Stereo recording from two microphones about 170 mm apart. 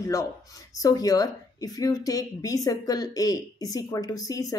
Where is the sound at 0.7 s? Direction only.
20° left (ahead or behind).